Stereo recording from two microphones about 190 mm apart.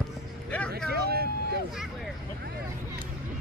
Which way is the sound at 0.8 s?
55° right (ahead or behind).